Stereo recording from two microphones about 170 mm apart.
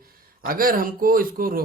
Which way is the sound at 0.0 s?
60° right (ahead or behind).